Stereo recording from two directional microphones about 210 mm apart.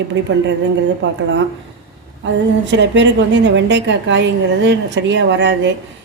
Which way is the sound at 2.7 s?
55° right (ahead or behind).